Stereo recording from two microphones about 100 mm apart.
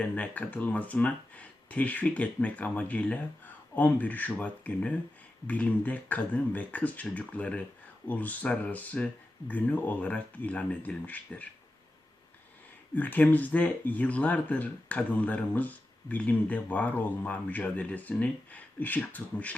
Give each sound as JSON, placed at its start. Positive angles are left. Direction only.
{"t": 0.0, "sound": "speech", "side_deg": 15}
{"t": 13.0, "sound": "speech", "side_deg": 15}